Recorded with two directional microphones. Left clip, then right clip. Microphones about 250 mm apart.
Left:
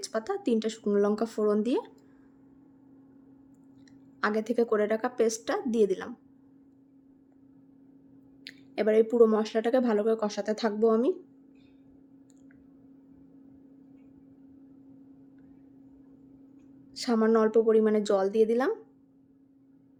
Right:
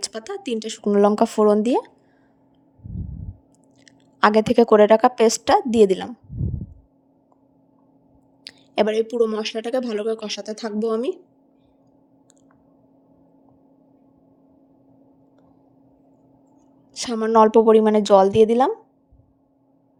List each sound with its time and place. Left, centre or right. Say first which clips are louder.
0.0 s a woman's voice: right 1 dB; right
3.8 s a woman's voice: right 13 dB; right
8.4 s a woman's voice: right 7 dB; right
16.9 s a woman's voice: right 6 dB; right